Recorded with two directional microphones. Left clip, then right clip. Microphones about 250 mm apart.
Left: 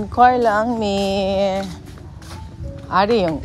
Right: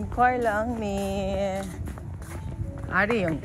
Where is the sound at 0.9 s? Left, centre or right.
Left.